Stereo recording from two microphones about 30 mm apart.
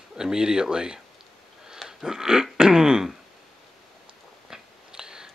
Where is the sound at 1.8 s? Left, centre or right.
Centre.